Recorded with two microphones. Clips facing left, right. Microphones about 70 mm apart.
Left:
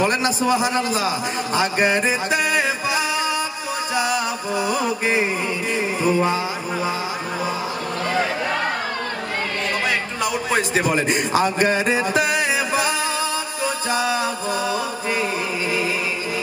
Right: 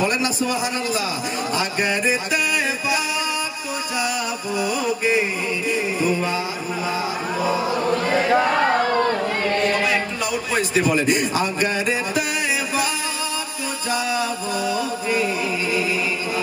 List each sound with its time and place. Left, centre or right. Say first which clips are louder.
0.0 s a man's voice: left 2 dB; left
3.9 s music: left 3 dB; left
5.7 s a man's voice: left 1 dB; left
10.5 s a man's voice: right 1 dB; left
13.8 s music: even; left